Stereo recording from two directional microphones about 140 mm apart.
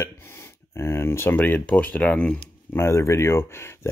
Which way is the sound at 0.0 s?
15° left (ahead or behind).